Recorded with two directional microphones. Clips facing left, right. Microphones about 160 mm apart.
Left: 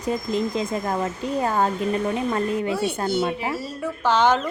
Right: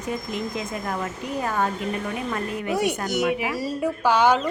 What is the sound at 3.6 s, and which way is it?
Speech, 10° right (ahead or behind).